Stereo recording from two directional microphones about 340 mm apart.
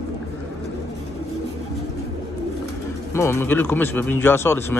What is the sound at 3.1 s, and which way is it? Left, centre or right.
Speech, centre.